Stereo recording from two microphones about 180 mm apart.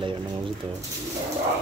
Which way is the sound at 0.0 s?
30° right (ahead or behind).